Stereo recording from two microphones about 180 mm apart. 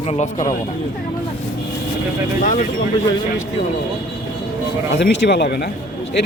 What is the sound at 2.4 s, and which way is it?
Speech, 45° left (ahead or behind).